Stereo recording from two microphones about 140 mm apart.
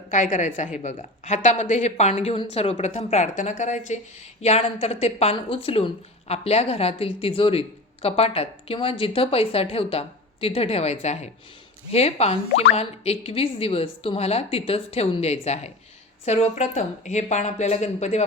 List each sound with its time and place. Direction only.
0.1 s a woman's voice: 65° left (ahead or behind)